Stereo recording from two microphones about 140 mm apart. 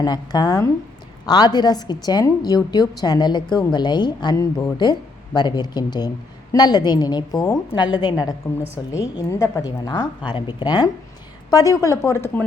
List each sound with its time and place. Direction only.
0.0 s a woman's voice: 30° left (ahead or behind)